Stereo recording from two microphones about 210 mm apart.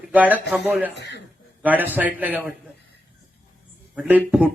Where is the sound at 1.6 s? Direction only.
10° right (ahead or behind).